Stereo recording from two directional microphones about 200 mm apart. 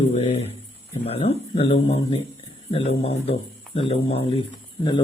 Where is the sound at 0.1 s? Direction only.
35° left (ahead or behind).